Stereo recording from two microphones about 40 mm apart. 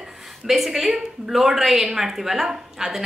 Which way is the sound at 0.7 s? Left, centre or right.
Centre.